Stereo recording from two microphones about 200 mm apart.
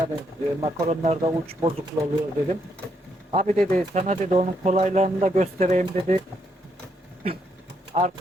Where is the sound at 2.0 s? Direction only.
20° right (ahead or behind).